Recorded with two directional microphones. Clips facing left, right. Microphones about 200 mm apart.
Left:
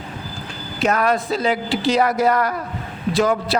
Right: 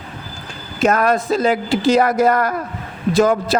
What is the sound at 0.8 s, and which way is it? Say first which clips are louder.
A man's voice: right 3 dB; 45° right (ahead or behind).